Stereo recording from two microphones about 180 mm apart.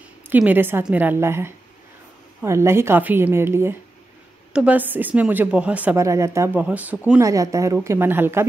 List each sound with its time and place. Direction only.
0.3 s a woman's voice: 10° right (ahead or behind)